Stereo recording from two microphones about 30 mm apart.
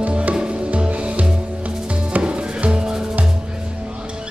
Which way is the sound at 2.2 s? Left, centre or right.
Right.